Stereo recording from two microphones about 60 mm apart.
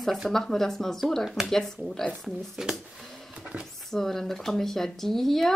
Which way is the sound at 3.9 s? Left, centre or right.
Centre.